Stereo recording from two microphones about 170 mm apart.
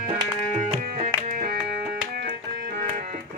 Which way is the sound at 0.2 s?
40° right (ahead or behind).